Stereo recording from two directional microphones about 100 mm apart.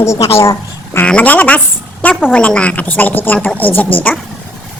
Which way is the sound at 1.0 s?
15° left (ahead or behind).